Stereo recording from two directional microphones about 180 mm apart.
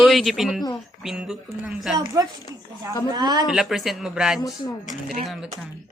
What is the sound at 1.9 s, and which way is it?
Speech, 20° right (ahead or behind).